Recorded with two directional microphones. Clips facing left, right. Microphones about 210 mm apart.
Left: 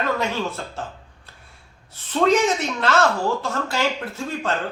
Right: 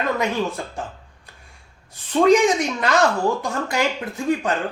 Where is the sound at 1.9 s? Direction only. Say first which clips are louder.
Right 3 dB; 15° right (ahead or behind).